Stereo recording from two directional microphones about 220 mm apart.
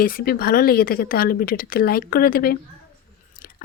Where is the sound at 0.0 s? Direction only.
40° left (ahead or behind).